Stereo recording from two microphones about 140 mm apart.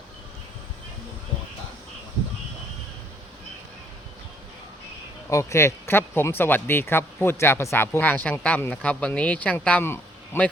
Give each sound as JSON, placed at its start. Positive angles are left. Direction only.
{"t": 5.3, "sound": "speech", "side_deg": 20}